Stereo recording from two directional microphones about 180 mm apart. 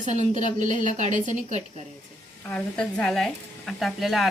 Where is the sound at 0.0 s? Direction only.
40° right (ahead or behind).